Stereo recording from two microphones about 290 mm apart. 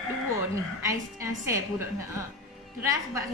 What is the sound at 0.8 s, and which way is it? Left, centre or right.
Speech, centre.